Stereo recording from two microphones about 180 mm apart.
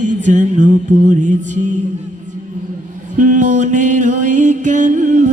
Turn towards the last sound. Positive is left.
turn(degrees=-45)  # may be behind; listen again after turning